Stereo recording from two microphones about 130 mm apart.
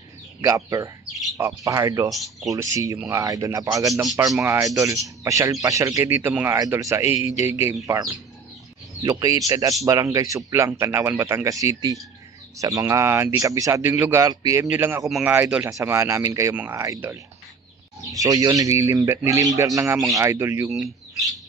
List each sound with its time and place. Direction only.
0.4 s a man's voice: 20° right (ahead or behind)
2.0 s speech: centre (ahead or behind)
2.4 s a man's voice: 25° right (ahead or behind)